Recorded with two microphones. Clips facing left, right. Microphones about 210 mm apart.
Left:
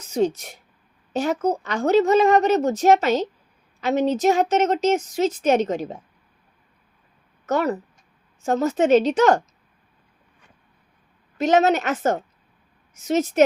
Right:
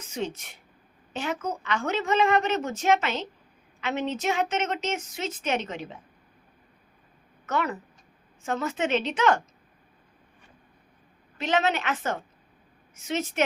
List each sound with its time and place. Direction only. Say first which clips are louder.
0.0 s a woman's voice: left 10 dB; 40° left (ahead or behind)
7.4 s a woman's voice: left 7 dB; 40° left (ahead or behind)
11.3 s a woman's voice: left 8 dB; 40° left (ahead or behind)